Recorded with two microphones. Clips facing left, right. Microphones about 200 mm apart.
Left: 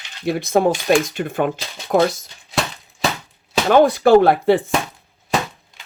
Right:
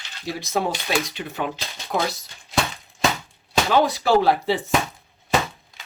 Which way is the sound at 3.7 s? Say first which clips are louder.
Left 8 dB; 55° left (ahead or behind).